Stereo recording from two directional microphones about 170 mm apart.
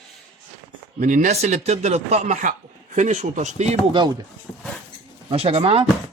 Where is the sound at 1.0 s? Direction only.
45° right (ahead or behind).